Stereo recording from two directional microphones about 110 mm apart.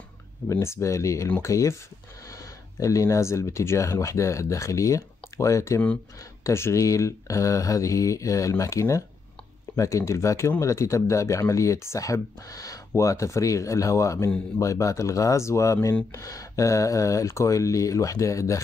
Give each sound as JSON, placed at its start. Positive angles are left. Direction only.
{"t": 0.5, "sound": "speech", "side_deg": 25}